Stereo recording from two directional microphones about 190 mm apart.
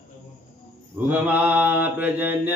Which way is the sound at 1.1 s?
10° right (ahead or behind).